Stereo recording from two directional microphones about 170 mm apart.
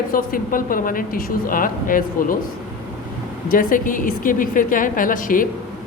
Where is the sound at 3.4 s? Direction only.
55° left (ahead or behind).